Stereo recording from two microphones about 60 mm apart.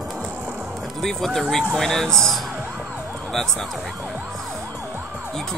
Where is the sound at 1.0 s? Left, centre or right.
Centre.